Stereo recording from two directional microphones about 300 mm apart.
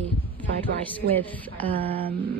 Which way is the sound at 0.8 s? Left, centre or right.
Centre.